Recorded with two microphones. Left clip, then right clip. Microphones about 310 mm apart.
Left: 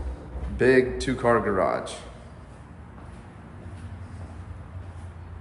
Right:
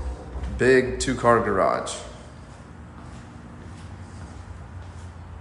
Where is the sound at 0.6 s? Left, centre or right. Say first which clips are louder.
Right 1 dB; centre.